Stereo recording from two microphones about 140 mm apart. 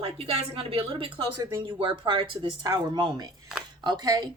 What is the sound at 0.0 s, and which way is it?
A woman's voice, 45° right (ahead or behind).